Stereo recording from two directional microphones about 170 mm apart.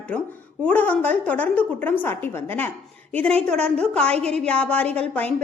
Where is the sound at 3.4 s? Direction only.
5° left (ahead or behind).